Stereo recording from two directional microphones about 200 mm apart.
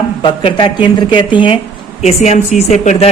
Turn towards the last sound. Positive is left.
turn(degrees=35)  # may be behind; listen again after turning